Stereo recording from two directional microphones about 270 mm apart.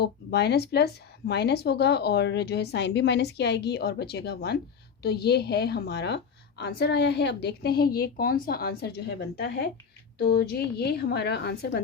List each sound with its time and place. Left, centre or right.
0.0 s speech: left